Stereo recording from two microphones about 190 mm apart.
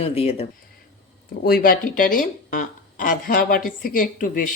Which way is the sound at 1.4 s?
50° left (ahead or behind).